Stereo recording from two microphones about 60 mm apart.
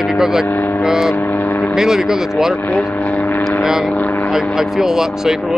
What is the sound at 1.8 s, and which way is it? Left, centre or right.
Speech, centre.